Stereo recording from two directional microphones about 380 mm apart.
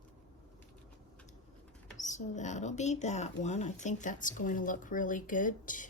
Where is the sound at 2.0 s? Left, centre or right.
Centre.